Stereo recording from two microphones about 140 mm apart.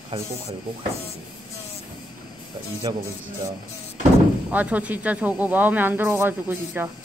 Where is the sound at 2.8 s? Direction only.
30° right (ahead or behind).